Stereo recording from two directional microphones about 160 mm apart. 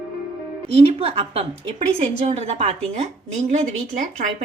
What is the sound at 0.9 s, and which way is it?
A woman's voice, 35° right (ahead or behind).